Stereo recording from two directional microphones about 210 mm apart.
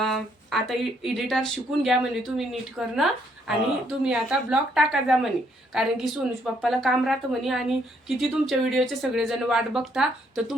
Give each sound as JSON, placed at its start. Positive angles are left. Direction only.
{"t": 0.0, "sound": "a woman's voice", "side_deg": 0}